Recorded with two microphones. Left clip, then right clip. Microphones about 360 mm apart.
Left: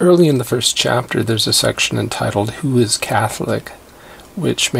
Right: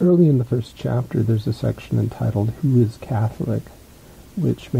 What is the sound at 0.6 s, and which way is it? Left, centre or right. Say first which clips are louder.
Speech: left 12 dB; centre.